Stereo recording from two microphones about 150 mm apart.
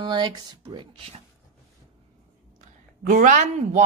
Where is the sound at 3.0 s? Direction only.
60° right (ahead or behind).